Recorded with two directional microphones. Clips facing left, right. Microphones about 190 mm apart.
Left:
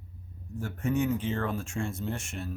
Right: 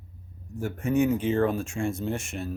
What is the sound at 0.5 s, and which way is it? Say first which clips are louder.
Speech: right 5 dB; 15° right (ahead or behind).